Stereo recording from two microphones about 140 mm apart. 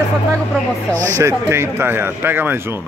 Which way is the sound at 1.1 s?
20° right (ahead or behind).